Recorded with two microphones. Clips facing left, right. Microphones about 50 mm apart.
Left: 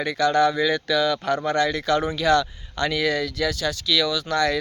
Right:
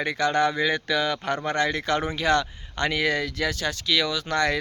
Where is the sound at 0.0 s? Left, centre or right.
Right.